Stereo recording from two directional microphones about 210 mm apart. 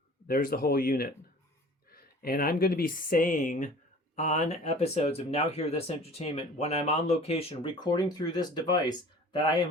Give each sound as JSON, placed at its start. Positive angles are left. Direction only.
{"t": 0.3, "sound": "speech", "side_deg": 45}